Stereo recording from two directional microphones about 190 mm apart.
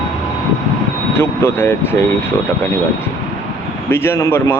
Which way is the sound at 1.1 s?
15° left (ahead or behind).